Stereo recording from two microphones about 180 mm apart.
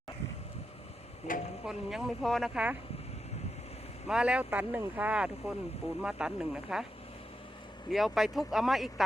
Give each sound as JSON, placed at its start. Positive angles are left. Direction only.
{"t": 1.3, "sound": "speech", "side_deg": 50}
{"t": 1.6, "sound": "speech", "side_deg": -5}
{"t": 4.1, "sound": "speech", "side_deg": -5}
{"t": 7.9, "sound": "speech", "side_deg": 0}